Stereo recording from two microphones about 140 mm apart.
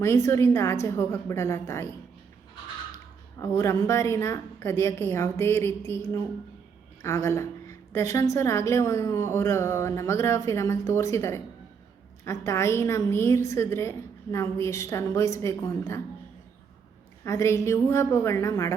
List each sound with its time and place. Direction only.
0.0 s a woman's voice: 20° left (ahead or behind)
3.4 s a woman's voice: 20° left (ahead or behind)
17.2 s a woman's voice: 20° left (ahead or behind)